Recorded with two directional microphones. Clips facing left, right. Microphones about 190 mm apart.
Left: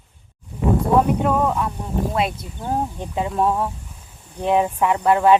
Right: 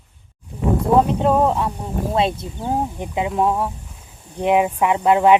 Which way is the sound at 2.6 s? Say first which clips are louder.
Right 1 dB; 15° right (ahead or behind).